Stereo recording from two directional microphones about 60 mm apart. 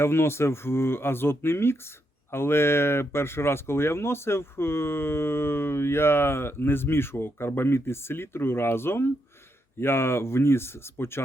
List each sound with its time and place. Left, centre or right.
0.0 s speech: left